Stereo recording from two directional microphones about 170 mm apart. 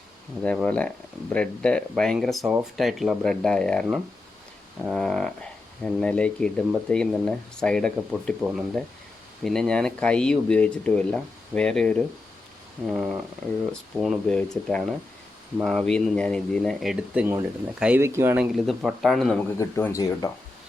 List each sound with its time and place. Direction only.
0.4 s speech: 5° left (ahead or behind); by 18.4 s 15° right (ahead or behind)
18.5 s speech: centre (ahead or behind)
19.5 s speech: 15° left (ahead or behind)